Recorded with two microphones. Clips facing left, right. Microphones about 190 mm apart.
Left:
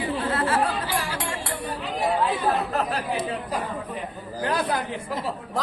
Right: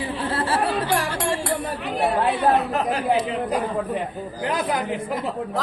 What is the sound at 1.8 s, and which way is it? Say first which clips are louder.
Chatter: right 1 dB; 65° right (ahead or behind).